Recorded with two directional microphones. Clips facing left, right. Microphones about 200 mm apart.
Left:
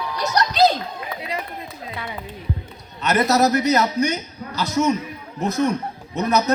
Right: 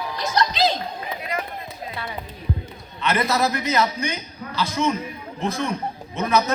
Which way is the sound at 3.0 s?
40° left (ahead or behind).